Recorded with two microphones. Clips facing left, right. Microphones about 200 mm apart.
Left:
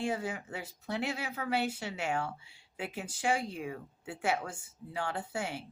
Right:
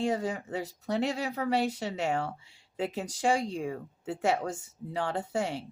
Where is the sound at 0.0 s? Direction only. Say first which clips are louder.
Right 5 dB; 35° right (ahead or behind).